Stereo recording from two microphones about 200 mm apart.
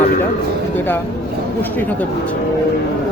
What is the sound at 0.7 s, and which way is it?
Speech, 10° left (ahead or behind).